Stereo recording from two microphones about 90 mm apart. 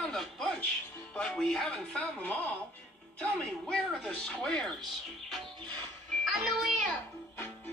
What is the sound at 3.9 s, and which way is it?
Speech, 5° left (ahead or behind).